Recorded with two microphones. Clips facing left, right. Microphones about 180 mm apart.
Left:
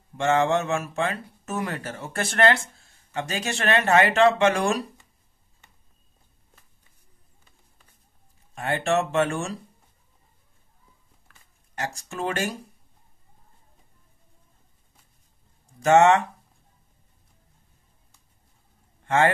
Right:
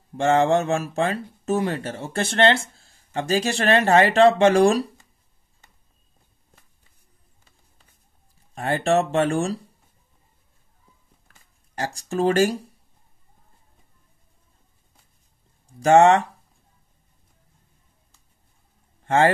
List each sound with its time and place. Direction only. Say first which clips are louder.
0.2 s speech: right 3 dB; 35° right (ahead or behind)
8.5 s speech: right 3 dB; 35° right (ahead or behind)
11.7 s speech: right 6 dB; 35° right (ahead or behind)
15.8 s speech: right 2 dB; 35° right (ahead or behind)
19.0 s a man's voice: right 3 dB; 35° right (ahead or behind)